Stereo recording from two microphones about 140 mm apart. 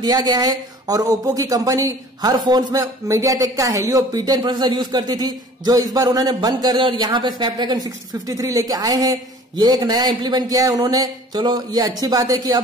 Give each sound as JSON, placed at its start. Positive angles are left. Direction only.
{"t": 0.0, "sound": "speech", "side_deg": -30}